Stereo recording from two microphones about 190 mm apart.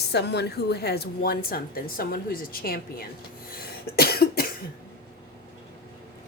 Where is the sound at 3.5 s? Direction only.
55° left (ahead or behind).